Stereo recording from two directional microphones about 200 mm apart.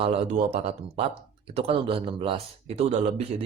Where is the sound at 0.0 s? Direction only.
30° right (ahead or behind).